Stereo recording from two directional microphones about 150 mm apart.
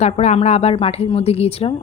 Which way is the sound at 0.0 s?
45° left (ahead or behind).